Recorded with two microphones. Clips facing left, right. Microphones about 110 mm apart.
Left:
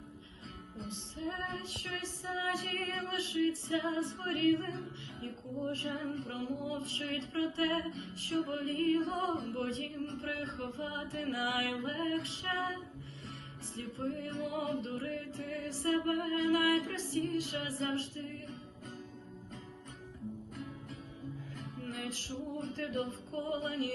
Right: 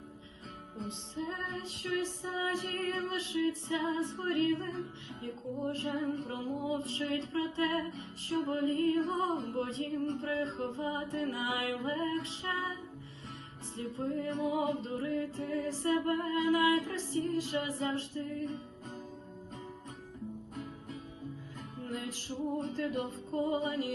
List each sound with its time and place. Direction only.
0.9 s music: 20° right (ahead or behind)
13.7 s music: 20° right (ahead or behind)
21.8 s music: 20° right (ahead or behind)